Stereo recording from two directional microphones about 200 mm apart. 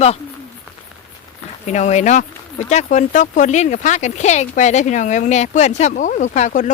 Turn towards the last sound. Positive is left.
turn(degrees=40)  # may be behind; listen again after turning